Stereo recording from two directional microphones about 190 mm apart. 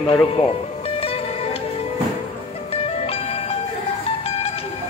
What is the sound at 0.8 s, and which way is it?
Music, 30° left (ahead or behind).